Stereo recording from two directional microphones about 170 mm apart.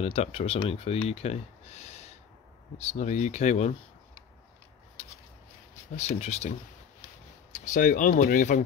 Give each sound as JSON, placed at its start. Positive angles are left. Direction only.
{"t": 0.0, "sound": "speech", "side_deg": 35}
{"t": 5.9, "sound": "speech", "side_deg": 40}
{"t": 7.5, "sound": "speech", "side_deg": 50}